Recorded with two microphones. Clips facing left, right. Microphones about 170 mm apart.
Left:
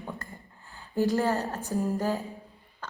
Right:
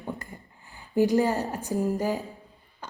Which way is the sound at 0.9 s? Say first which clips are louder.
Right 3 dB; 15° right (ahead or behind).